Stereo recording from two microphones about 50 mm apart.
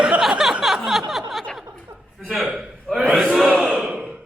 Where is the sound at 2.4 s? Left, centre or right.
Centre.